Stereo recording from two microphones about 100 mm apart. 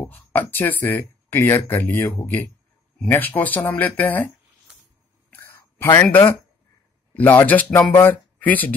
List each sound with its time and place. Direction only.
0.0 s speech: 20° left (ahead or behind)
5.3 s a sound: 25° left (ahead or behind)
7.2 s speech: 20° left (ahead or behind)